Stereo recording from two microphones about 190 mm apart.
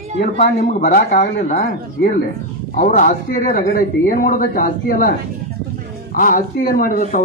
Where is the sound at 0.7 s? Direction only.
45° left (ahead or behind).